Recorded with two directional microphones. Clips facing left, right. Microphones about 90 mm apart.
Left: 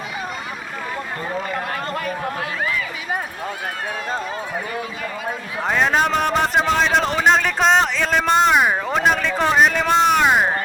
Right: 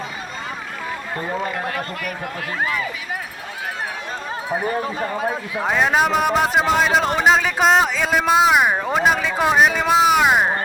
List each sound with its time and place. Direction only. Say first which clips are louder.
1.7 s speech: left 2 dB; 35° left (ahead or behind)
4.6 s speech: right 5 dB; 40° right (ahead or behind)
5.6 s a man's voice: even; 5° right (ahead or behind)